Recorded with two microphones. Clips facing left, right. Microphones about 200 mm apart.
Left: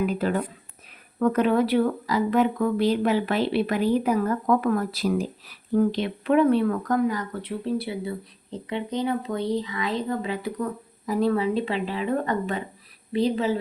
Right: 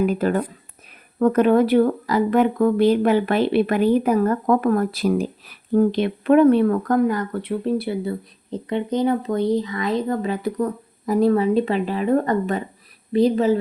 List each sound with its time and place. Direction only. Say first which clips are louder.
0.0 s speech: right 5 dB; 50° right (ahead or behind)